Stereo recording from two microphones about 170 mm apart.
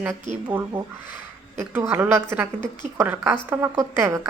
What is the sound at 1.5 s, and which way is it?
Speech, 15° right (ahead or behind).